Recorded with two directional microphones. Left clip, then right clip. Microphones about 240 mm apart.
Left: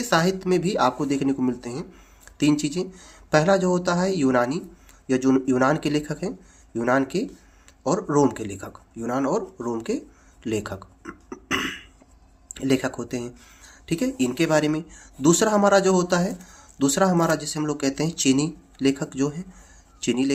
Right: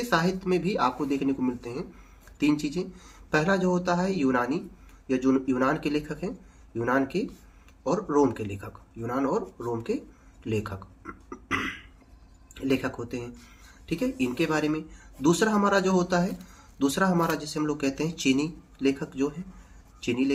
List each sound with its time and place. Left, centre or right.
0.1 s speech: left
10.4 s a sound: left
12.5 s speech: left